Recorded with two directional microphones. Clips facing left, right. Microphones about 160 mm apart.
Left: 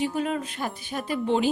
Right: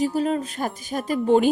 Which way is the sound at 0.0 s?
35° right (ahead or behind).